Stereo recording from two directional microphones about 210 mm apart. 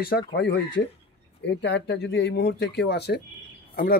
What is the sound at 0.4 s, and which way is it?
Speech, 55° left (ahead or behind).